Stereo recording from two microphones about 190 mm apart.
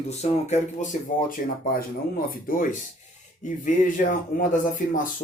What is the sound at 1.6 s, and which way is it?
Speech, 50° left (ahead or behind).